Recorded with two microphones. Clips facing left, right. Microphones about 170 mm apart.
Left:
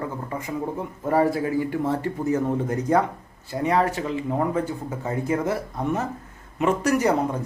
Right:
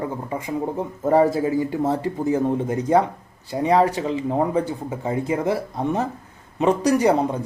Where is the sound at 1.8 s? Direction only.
40° right (ahead or behind).